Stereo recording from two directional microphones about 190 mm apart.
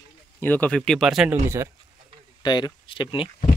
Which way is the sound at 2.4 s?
20° left (ahead or behind).